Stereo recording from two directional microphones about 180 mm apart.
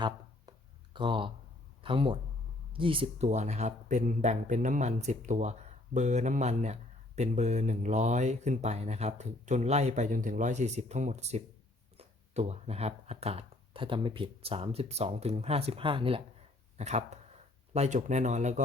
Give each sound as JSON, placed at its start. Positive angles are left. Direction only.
{"t": 0.9, "sound": "speech", "side_deg": -30}